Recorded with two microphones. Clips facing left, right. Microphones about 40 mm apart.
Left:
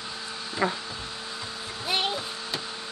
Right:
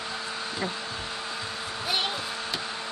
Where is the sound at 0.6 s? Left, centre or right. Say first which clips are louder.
Left 7 dB; left.